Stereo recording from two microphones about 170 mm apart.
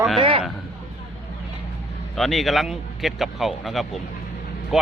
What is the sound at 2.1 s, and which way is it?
Speech, centre (ahead or behind).